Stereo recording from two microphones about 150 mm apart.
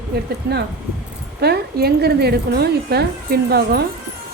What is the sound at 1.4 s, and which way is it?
Speech, 90° right.